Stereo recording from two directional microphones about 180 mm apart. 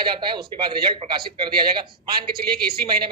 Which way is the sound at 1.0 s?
35° right (ahead or behind).